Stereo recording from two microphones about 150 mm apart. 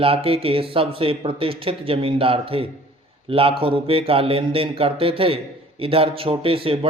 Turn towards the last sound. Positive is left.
turn(degrees=-35)  # may be behind; listen again after turning